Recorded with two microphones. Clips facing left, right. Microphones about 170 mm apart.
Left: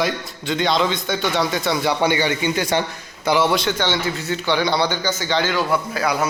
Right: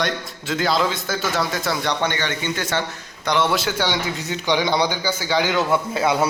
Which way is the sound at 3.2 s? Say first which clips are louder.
Left 2 dB; 5° left (ahead or behind).